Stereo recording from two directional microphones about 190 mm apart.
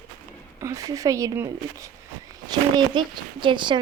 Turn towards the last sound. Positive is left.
turn(degrees=-25)  # may be behind; listen again after turning